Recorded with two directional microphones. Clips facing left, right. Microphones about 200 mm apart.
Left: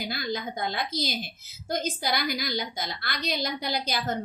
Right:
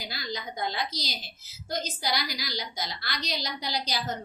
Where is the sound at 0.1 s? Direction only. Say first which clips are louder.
Left 5 dB; 55° left (ahead or behind).